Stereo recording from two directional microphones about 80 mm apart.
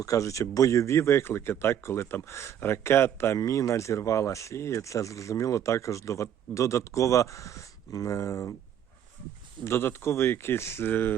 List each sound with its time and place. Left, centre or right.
0.0 s speech: left
3.3 s speech: left
9.6 s speech: left